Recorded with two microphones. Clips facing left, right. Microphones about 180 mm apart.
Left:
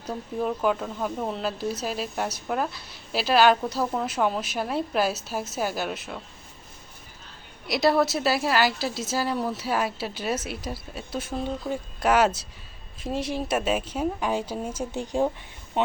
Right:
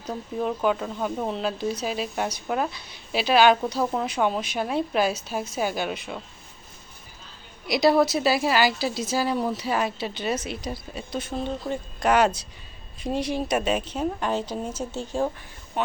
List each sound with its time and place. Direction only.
0.0 s speech: 5° left (ahead or behind)
7.7 s a woman's voice: centre (ahead or behind); by 15.3 s 15° left (ahead or behind)